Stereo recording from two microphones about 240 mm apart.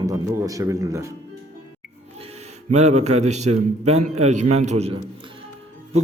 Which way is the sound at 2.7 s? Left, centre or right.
Right.